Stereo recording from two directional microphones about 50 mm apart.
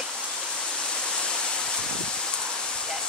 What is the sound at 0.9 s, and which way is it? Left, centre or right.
Waterfall, centre.